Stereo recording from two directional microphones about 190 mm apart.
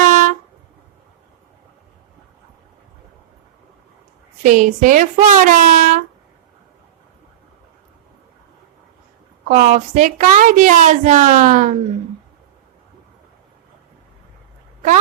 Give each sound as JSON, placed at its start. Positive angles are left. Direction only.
{"t": 0.0, "sound": "a sound", "side_deg": -45}
{"t": 4.4, "sound": "a woman's voice", "side_deg": -45}
{"t": 9.5, "sound": "a woman's voice", "side_deg": -40}